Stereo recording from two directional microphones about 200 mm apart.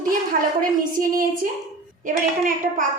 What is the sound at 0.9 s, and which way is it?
Speech, 45° right (ahead or behind).